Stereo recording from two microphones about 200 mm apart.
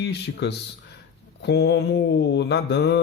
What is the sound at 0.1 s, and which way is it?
Mantra, 55° left (ahead or behind).